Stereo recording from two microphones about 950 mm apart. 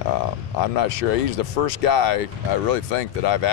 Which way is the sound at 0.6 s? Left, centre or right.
Left.